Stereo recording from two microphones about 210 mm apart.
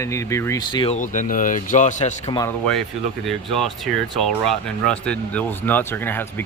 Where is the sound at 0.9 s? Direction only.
35° left (ahead or behind).